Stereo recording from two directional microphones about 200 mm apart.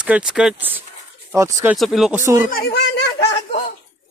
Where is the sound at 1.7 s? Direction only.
Centre (ahead or behind).